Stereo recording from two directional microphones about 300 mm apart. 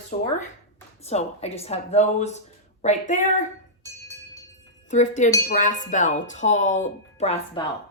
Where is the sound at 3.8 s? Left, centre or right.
Centre.